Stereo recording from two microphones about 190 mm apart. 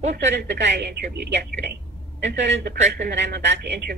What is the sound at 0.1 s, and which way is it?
Speech, 60° right (ahead or behind).